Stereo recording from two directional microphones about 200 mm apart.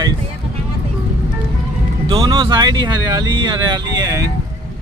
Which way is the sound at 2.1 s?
25° right (ahead or behind).